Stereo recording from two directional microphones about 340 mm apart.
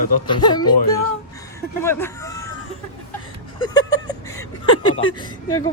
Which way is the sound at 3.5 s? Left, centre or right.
Centre.